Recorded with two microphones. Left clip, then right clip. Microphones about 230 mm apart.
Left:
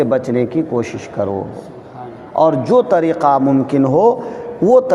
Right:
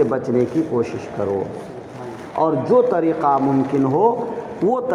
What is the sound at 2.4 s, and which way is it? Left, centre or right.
A man's voice, left.